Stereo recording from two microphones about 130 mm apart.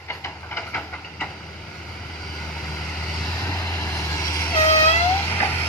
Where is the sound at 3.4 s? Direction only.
25° left (ahead or behind).